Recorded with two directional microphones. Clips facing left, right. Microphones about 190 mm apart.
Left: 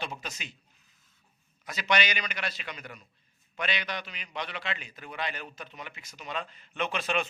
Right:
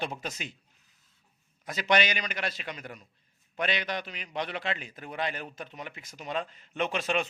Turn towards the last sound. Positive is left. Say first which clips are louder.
# right 1 dB
turn(degrees=-40)  # may be behind; listen again after turning